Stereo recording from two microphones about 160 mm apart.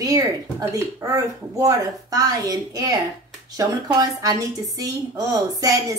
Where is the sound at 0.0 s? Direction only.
20° right (ahead or behind).